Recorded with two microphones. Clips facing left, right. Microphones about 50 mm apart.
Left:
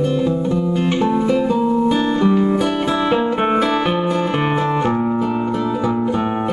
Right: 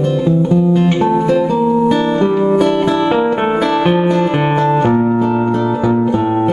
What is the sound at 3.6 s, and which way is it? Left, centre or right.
Music, centre.